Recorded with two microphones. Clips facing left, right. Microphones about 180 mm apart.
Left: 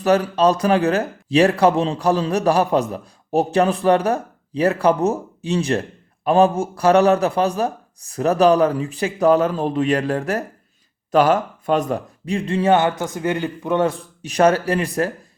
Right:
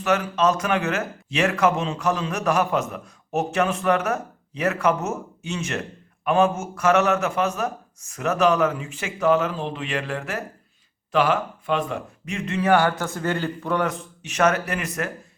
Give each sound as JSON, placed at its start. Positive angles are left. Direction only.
{"t": 0.0, "sound": "speech", "side_deg": 35}
{"t": 13.8, "sound": "speech", "side_deg": 35}